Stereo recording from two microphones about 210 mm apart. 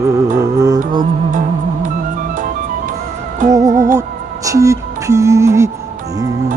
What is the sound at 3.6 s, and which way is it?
Music, 35° right (ahead or behind).